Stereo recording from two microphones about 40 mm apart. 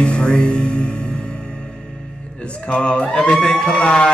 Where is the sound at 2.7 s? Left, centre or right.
Left.